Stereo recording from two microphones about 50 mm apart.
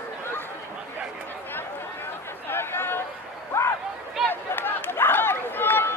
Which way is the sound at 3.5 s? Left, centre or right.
Left.